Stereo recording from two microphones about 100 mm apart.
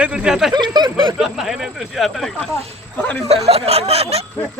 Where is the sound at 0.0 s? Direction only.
10° right (ahead or behind).